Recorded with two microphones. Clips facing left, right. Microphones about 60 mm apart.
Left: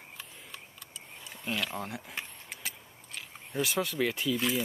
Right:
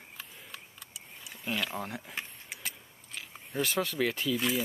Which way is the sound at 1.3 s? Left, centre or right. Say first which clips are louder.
Even; centre.